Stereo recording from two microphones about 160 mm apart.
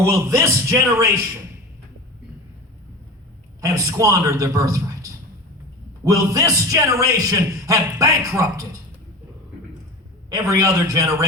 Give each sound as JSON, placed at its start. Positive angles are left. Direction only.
{"t": 0.0, "sound": "a man's voice", "side_deg": -20}
{"t": 3.6, "sound": "a man's voice", "side_deg": -20}
{"t": 6.1, "sound": "a man's voice", "side_deg": -20}
{"t": 10.2, "sound": "a man's voice", "side_deg": -20}